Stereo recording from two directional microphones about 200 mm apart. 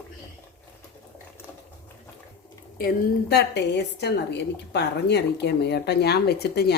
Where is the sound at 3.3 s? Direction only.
55° left (ahead or behind).